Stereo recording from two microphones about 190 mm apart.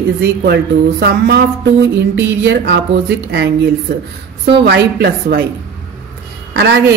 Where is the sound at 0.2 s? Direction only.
60° right (ahead or behind).